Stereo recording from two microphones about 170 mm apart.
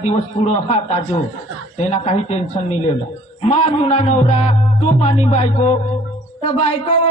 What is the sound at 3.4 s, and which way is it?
A man's voice, 40° left (ahead or behind).